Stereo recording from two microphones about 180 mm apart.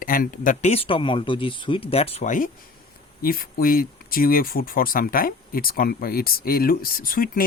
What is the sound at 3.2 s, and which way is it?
Speech, 55° left (ahead or behind).